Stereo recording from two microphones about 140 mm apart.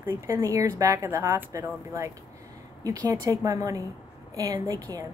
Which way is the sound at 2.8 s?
25° right (ahead or behind).